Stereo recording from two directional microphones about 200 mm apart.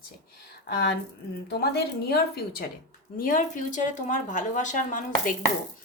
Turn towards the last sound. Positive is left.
turn(degrees=40)  # may be behind; listen again after turning